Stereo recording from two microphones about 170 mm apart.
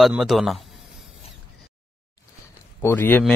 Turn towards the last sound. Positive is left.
turn(degrees=10)  # may be behind; listen again after turning